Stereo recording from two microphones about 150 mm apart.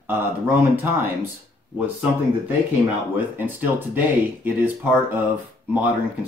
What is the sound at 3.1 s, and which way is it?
Speech, 10° right (ahead or behind).